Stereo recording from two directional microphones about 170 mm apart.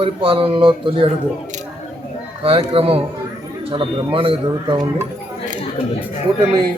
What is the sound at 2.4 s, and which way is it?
Speech, 35° right (ahead or behind).